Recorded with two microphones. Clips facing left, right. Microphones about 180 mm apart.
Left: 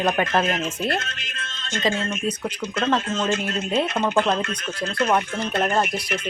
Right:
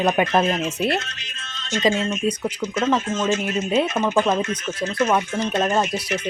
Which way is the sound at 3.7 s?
5° right (ahead or behind).